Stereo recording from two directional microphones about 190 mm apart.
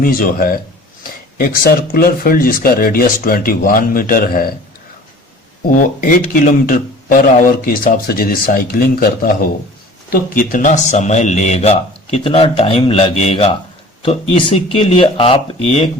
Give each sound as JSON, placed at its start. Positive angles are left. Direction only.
{"t": 0.0, "sound": "speech", "side_deg": 50}
{"t": 6.0, "sound": "speech", "side_deg": 45}